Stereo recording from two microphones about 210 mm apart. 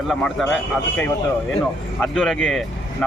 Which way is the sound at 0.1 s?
Centre (ahead or behind).